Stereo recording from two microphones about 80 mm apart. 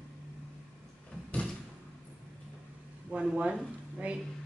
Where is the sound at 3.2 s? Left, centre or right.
Centre.